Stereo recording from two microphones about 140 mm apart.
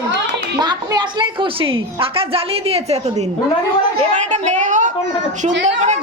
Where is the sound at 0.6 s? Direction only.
30° right (ahead or behind).